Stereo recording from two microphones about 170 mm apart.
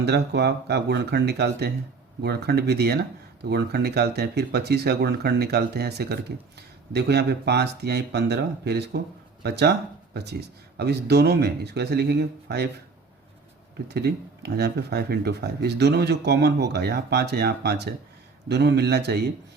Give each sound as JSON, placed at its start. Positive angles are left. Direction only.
{"t": 0.0, "sound": "speech", "side_deg": -80}
{"t": 10.8, "sound": "speech", "side_deg": -75}
{"t": 13.8, "sound": "speech", "side_deg": -75}